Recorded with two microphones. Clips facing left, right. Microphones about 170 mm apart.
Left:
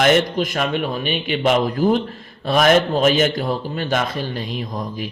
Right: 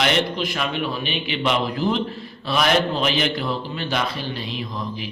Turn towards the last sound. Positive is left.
turn(degrees=45)  # may be behind; listen again after turning